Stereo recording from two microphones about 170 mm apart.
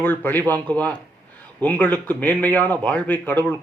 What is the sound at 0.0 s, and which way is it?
Speech, 10° left (ahead or behind).